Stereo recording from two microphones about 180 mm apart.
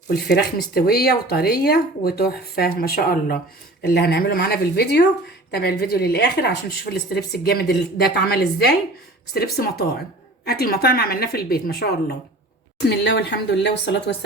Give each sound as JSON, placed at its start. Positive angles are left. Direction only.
{"t": 0.1, "sound": "a woman's voice", "side_deg": 60}
{"t": 12.9, "sound": "speech", "side_deg": 70}